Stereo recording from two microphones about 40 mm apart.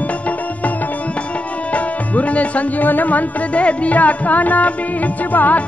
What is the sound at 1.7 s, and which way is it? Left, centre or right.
Music, left.